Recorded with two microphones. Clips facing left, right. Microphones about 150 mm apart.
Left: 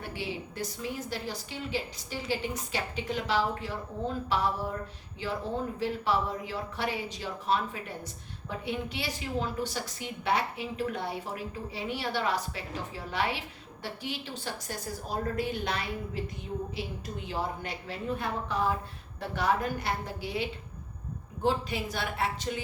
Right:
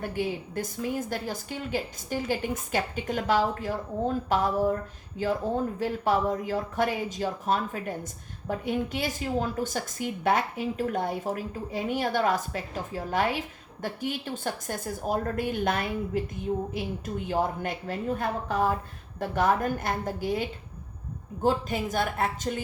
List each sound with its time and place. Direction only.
0.0 s a woman's voice: 50° right (ahead or behind)